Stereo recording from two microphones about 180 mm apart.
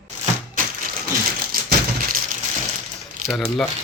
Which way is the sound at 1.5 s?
55° right (ahead or behind).